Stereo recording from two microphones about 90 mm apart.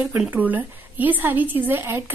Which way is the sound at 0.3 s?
20° right (ahead or behind).